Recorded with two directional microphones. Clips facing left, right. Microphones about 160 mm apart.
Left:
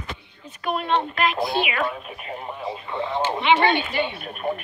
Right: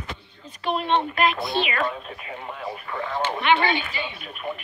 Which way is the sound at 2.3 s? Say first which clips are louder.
Left 2 dB; 20° left (ahead or behind).